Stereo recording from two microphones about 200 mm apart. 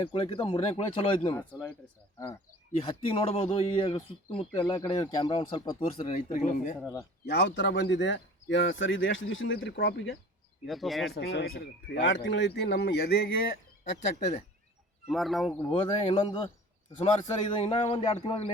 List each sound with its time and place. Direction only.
0.0 s a man's voice: 25° left (ahead or behind)
2.7 s a man's voice: 25° left (ahead or behind)
6.7 s speech: 10° left (ahead or behind)
7.3 s speech: 55° left (ahead or behind)
10.7 s speech: centre (ahead or behind)
11.1 s speech: 55° left (ahead or behind)
15.0 s speech: centre (ahead or behind)
15.7 s a man's voice: 25° left (ahead or behind)